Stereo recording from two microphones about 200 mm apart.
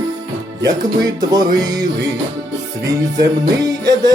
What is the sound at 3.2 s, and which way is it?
Music, 20° right (ahead or behind).